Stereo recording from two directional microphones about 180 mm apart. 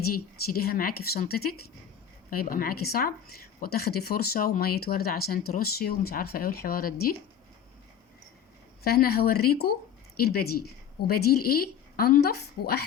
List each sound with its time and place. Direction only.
0.1 s a woman's voice: 55° left (ahead or behind)
8.8 s a woman's voice: 60° left (ahead or behind)